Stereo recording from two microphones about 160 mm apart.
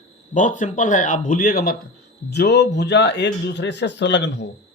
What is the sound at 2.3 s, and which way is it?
Speech, 90° left.